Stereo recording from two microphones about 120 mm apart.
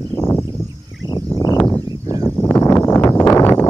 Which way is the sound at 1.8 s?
30° right (ahead or behind).